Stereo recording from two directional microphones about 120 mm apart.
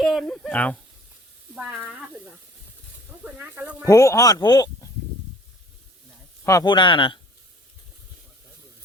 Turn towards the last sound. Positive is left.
turn(degrees=40)  # may be behind; listen again after turning